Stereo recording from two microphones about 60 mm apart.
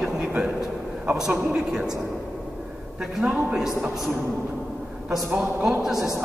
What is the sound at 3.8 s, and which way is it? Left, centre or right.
Speech, centre.